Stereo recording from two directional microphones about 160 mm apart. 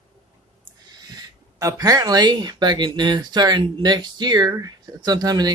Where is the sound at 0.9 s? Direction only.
25° right (ahead or behind).